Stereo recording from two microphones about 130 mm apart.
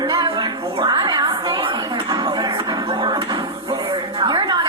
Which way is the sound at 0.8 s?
35° right (ahead or behind).